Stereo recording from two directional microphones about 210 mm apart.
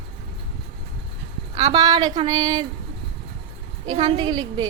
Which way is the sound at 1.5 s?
20° right (ahead or behind).